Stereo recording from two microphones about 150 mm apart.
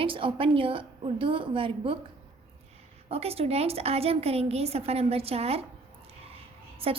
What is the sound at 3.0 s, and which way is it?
A woman's voice, 40° right (ahead or behind).